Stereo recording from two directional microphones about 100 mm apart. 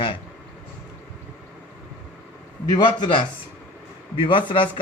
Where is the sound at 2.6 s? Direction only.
45° left (ahead or behind).